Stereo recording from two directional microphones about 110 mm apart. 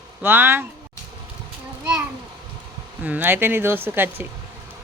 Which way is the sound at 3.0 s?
15° right (ahead or behind).